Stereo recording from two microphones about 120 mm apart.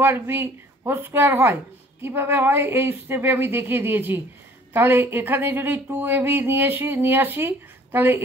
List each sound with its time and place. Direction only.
0.0 s speech: 20° right (ahead or behind)